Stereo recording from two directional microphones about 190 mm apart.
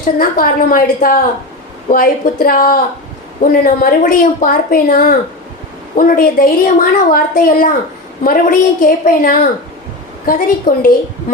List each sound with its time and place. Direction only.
0.0 s a woman's voice: 50° left (ahead or behind)